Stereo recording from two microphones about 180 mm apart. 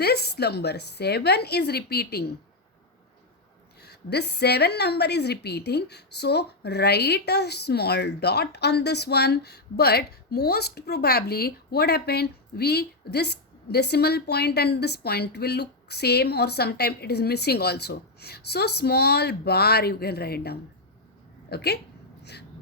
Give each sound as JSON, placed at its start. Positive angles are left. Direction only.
{"t": 0.0, "sound": "a woman's voice", "side_deg": 65}
{"t": 3.8, "sound": "a woman's voice", "side_deg": 65}
{"t": 22.2, "sound": "gasp", "side_deg": 65}